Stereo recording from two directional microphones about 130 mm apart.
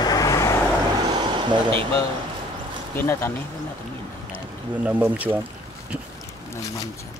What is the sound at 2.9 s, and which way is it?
Speech, 15° left (ahead or behind).